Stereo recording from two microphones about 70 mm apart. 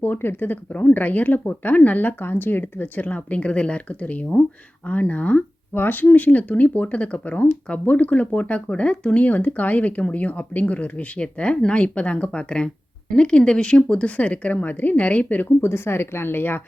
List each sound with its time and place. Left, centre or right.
0.0 s speech: left
15.6 s speech: left